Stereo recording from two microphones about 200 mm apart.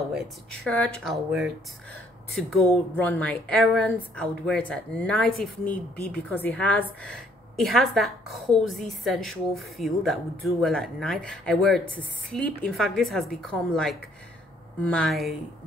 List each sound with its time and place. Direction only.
0.1 s speech: 5° left (ahead or behind)